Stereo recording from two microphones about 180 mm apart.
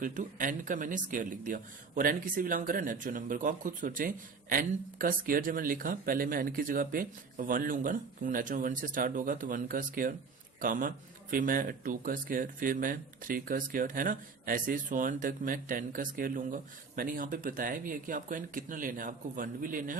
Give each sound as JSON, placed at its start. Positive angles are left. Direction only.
{"t": 0.0, "sound": "speech", "side_deg": -45}